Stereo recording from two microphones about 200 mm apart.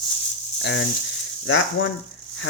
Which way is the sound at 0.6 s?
65° left (ahead or behind).